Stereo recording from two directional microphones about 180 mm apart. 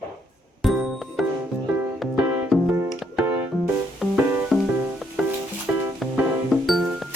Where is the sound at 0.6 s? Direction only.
Centre (ahead or behind).